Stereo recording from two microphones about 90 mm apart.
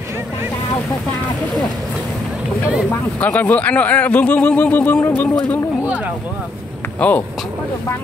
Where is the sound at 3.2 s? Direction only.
20° left (ahead or behind).